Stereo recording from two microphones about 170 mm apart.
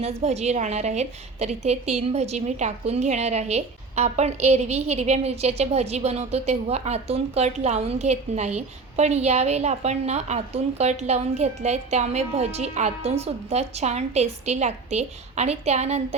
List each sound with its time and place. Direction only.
0.0 s a woman's voice: 40° right (ahead or behind)